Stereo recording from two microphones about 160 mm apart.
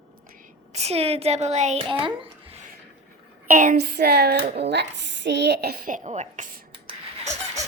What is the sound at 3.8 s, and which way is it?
Speech, 90° right.